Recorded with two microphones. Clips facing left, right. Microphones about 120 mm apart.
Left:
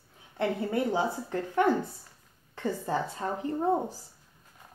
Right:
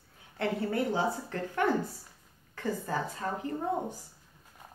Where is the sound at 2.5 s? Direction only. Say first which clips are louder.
Left 3 dB; 25° left (ahead or behind).